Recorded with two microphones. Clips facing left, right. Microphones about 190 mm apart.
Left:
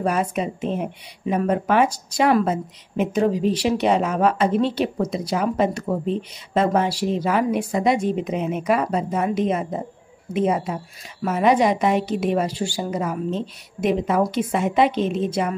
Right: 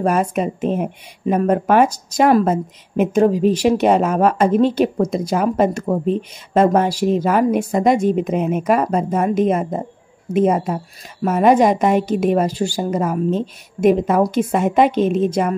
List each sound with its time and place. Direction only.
0.0 s speech: 45° right (ahead or behind)